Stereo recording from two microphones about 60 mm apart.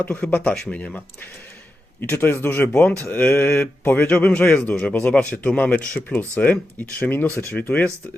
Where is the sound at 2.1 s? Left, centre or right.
Left.